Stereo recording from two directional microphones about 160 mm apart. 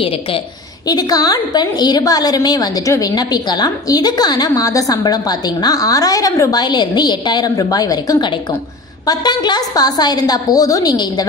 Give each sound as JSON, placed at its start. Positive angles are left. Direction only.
{"t": 0.0, "sound": "a woman's voice", "side_deg": 35}
{"t": 0.8, "sound": "a woman's voice", "side_deg": 25}